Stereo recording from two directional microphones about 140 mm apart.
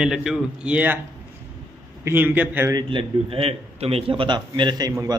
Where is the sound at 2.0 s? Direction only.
15° right (ahead or behind).